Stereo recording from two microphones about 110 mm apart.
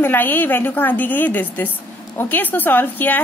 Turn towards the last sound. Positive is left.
turn(degrees=15)  # may be behind; listen again after turning